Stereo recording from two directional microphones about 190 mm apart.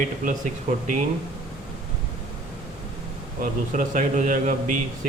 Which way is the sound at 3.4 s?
45° right (ahead or behind).